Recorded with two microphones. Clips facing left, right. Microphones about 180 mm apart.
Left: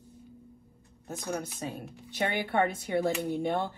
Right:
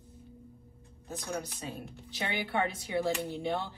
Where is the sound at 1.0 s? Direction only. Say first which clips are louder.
Left 3 dB; 50° left (ahead or behind).